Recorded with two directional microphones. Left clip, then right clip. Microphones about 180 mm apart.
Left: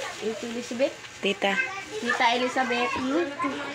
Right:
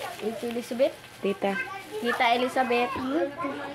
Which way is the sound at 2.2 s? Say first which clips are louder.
Even; 25° right (ahead or behind).